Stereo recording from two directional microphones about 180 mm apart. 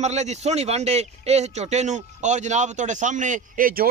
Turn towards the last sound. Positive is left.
turn(degrees=-50)  # may be behind; listen again after turning